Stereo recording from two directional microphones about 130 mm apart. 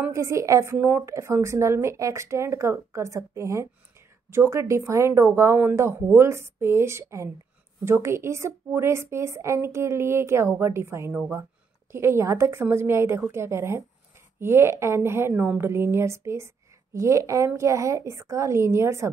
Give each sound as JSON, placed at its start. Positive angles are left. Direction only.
{"t": 0.1, "sound": "a woman's voice", "side_deg": -25}